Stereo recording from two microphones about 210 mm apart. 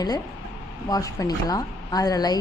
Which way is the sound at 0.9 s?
15° left (ahead or behind).